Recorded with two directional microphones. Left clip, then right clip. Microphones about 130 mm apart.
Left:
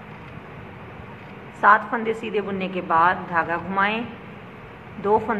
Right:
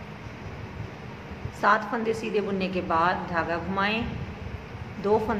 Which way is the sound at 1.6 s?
10° right (ahead or behind).